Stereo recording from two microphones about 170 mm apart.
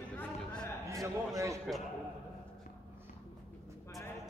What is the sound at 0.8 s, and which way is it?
Speech, 20° right (ahead or behind).